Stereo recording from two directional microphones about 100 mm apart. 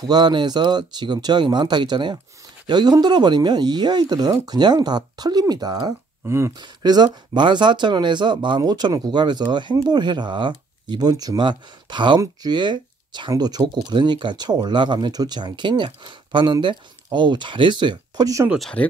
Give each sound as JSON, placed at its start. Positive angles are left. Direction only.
{"t": 0.1, "sound": "speech", "side_deg": -50}
{"t": 6.2, "sound": "speech", "side_deg": -25}
{"t": 6.6, "sound": "speech", "side_deg": -45}
{"t": 18.6, "sound": "speech", "side_deg": 10}